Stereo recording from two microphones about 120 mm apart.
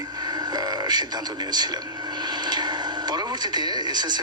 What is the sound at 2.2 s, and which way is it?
Television, 35° right (ahead or behind).